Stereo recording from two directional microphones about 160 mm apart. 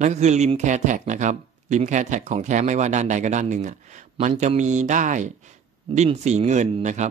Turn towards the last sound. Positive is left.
turn(degrees=-45)  # may be behind; listen again after turning